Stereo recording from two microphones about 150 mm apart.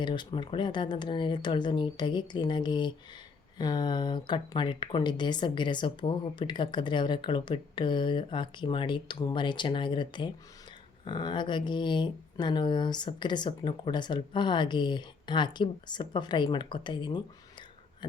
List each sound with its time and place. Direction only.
0.0 s speech: 30° left (ahead or behind)